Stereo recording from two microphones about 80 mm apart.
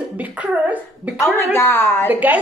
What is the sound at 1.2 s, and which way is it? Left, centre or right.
Speech, left.